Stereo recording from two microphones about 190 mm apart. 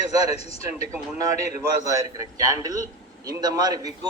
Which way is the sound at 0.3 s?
30° left (ahead or behind).